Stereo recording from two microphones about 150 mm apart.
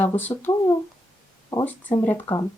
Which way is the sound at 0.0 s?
10° left (ahead or behind).